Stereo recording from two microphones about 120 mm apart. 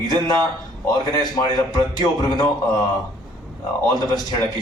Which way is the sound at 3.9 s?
35° left (ahead or behind).